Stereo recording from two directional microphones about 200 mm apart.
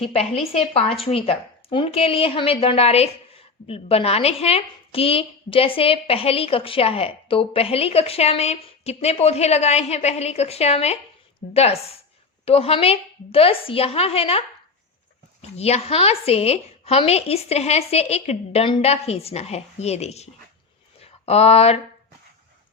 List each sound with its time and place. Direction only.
0.1 s a woman's voice: 30° left (ahead or behind)